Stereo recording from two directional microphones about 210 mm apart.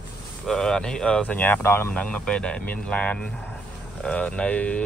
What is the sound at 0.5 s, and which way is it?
Speech, 5° left (ahead or behind).